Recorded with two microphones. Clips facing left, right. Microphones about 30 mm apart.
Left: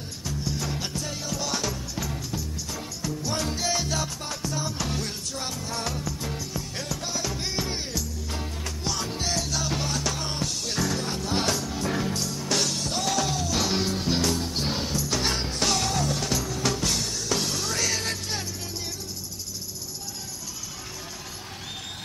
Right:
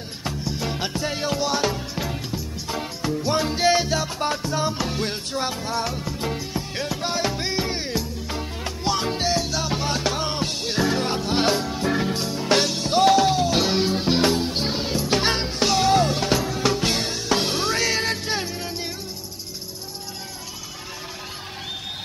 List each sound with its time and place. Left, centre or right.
0.7 s music: right
6.0 s music: right
9.8 s music: right
15.9 s music: right